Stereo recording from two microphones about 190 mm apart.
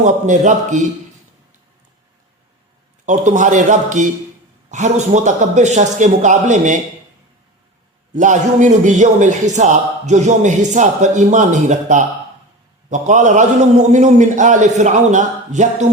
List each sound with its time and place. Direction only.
0.0 s a man's voice: 40° right (ahead or behind)
3.1 s a man's voice: 40° right (ahead or behind)
8.1 s a man's voice: 40° right (ahead or behind)